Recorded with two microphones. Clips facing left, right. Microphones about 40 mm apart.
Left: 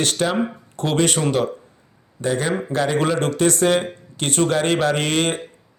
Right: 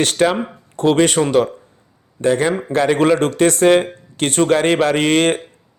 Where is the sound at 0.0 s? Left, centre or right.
Right.